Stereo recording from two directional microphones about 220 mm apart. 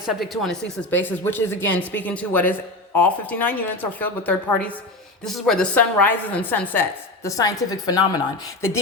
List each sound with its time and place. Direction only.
0.0 s speech: centre (ahead or behind); by 8.2 s 15° left (ahead or behind)